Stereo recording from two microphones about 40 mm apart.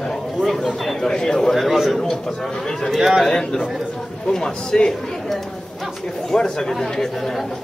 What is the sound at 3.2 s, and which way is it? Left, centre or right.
A man's voice, centre.